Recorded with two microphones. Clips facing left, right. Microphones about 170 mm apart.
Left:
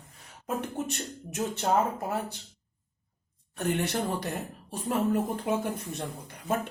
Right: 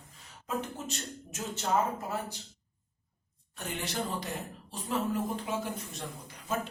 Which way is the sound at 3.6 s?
60° left (ahead or behind).